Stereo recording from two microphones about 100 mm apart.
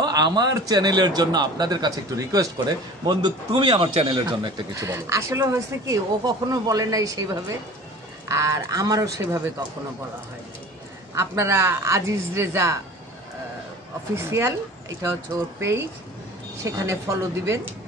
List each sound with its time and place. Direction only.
0.0 s a man's voice: 45° right (ahead or behind); by 4.2 s 65° right (ahead or behind)
4.3 s a man's voice: 50° right (ahead or behind)
4.7 s a woman's voice: 30° right (ahead or behind)
11.1 s a woman's voice: 30° right (ahead or behind)
14.1 s a woman's voice: 25° right (ahead or behind)
16.5 s a woman's voice: 30° right (ahead or behind)